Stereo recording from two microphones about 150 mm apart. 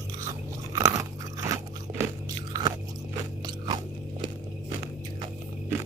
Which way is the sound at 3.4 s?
30° right (ahead or behind).